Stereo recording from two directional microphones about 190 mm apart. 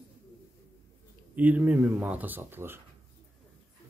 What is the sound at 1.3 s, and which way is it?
Speech, 10° right (ahead or behind).